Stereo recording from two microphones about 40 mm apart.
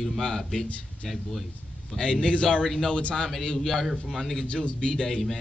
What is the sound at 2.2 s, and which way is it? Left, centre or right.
A man's voice, left.